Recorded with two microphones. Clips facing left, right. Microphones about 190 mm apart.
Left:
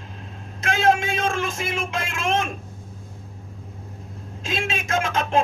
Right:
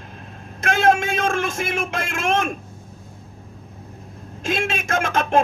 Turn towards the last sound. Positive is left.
turn(degrees=-55)  # may be behind; listen again after turning